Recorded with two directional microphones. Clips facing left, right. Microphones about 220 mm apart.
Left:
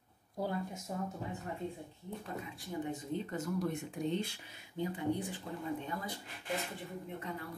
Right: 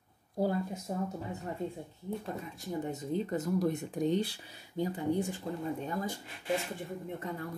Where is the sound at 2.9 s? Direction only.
35° right (ahead or behind).